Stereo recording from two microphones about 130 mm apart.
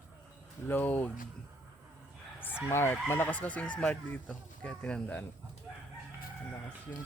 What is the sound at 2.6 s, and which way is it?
Speech, 15° left (ahead or behind).